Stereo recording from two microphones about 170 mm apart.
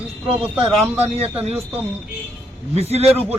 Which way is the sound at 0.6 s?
35° right (ahead or behind).